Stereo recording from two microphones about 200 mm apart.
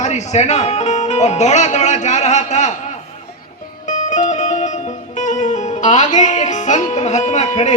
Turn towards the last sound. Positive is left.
turn(degrees=35)  # may be behind; listen again after turning